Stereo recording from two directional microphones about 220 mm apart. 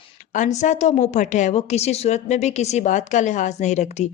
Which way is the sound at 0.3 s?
35° left (ahead or behind).